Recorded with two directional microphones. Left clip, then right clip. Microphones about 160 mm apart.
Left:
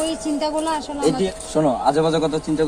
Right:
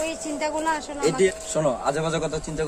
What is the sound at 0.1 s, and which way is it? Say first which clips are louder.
Speech: left 5 dB; 30° right (ahead or behind).